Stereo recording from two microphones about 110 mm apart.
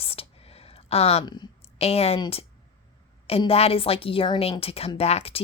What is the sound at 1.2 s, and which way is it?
Speech, 40° left (ahead or behind).